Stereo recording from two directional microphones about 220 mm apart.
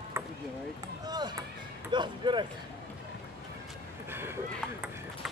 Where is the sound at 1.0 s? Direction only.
20° right (ahead or behind).